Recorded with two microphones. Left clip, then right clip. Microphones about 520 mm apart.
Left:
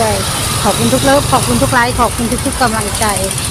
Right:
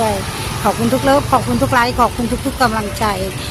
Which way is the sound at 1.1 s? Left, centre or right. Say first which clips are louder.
Left 2 dB; right.